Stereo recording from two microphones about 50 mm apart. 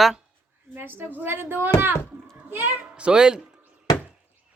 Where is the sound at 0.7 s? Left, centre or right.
Right.